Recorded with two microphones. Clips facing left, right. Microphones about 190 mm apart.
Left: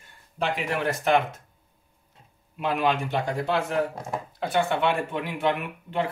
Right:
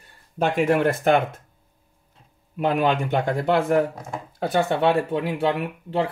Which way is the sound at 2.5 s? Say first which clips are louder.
Right 4 dB; 50° right (ahead or behind).